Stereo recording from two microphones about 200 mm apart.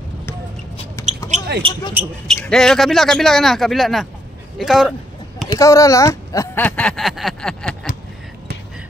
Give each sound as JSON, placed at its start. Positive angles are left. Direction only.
{"t": 1.0, "sound": "basketball bounce", "side_deg": 15}
{"t": 1.6, "sound": "speech", "side_deg": -25}
{"t": 2.2, "sound": "speech", "side_deg": 5}
{"t": 5.6, "sound": "speech", "side_deg": 15}